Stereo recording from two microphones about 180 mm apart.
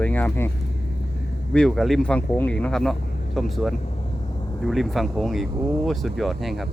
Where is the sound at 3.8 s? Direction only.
35° left (ahead or behind).